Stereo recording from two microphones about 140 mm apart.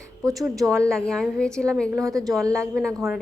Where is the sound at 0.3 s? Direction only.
Centre (ahead or behind).